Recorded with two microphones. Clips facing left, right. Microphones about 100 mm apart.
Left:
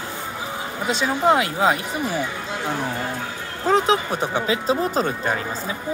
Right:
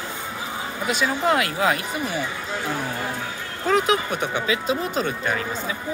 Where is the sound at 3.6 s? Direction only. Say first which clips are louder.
Left 2 dB; 30° left (ahead or behind).